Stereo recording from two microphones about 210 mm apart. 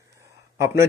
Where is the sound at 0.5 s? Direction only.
15° right (ahead or behind).